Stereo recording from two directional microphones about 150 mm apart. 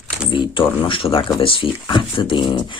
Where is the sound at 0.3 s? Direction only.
35° left (ahead or behind).